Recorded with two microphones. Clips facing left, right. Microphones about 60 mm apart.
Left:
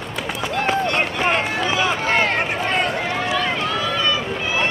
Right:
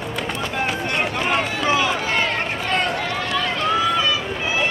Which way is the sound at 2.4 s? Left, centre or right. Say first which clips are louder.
Left 3 dB; left.